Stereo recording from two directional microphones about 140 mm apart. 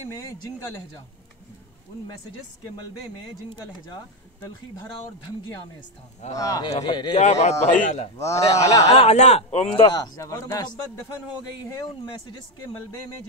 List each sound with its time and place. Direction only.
0.1 s speech: 20° left (ahead or behind)
3.9 s speech: 30° left (ahead or behind)
6.3 s speech: 25° left (ahead or behind)
7.2 s speech: 55° left (ahead or behind)
7.5 s a man's voice: 15° left (ahead or behind)
7.8 s speech: 55° left (ahead or behind)
8.2 s speech: 20° left (ahead or behind)
8.9 s speech: 50° left (ahead or behind)
9.8 s speech: 30° left (ahead or behind)